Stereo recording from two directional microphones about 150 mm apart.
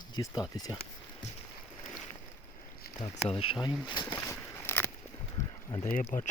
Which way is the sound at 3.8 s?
30° left (ahead or behind).